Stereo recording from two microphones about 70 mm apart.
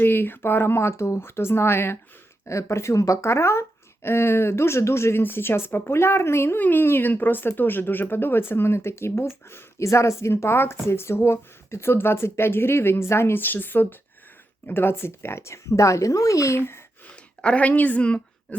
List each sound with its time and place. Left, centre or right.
0.0 s speech: left
16.6 s speech: left
17.4 s a woman's voice: centre